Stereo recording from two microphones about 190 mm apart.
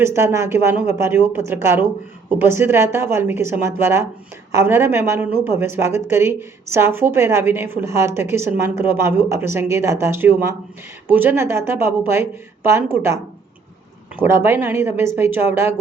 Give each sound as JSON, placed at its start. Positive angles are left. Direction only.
{"t": 0.0, "sound": "a woman's voice", "side_deg": -15}
{"t": 14.2, "sound": "a woman's voice", "side_deg": -10}